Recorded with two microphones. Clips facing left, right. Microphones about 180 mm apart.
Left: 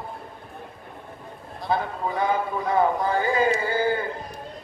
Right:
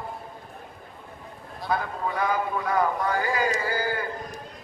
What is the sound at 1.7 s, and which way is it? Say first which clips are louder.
A man's voice: left 2 dB; 25° left (ahead or behind).